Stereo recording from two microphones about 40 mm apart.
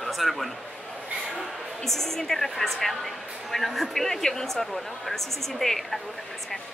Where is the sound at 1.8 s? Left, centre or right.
Centre.